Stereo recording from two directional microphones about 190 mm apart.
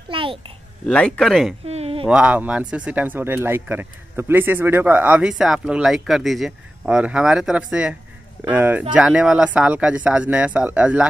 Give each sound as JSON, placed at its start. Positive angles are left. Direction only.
{"t": 0.1, "sound": "babbling", "side_deg": -25}
{"t": 0.8, "sound": "speech", "side_deg": 5}
{"t": 1.7, "sound": "a sound", "side_deg": -30}
{"t": 2.0, "sound": "speech", "side_deg": -5}